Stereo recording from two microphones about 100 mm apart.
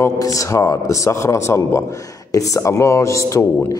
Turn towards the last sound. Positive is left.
turn(degrees=30)  # may be behind; listen again after turning